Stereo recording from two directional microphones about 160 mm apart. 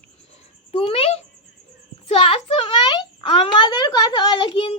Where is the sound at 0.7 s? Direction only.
40° left (ahead or behind).